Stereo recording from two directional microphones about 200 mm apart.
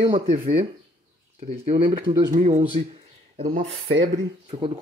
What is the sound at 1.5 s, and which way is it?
Speech, 30° right (ahead or behind).